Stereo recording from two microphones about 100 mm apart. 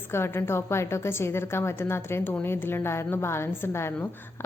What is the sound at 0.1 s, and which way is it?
A woman's voice, 25° left (ahead or behind).